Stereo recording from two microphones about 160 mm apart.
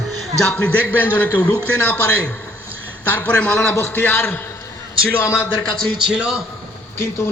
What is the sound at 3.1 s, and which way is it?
A man's voice, 10° left (ahead or behind).